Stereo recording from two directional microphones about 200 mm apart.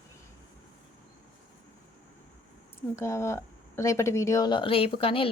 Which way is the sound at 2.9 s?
15° left (ahead or behind).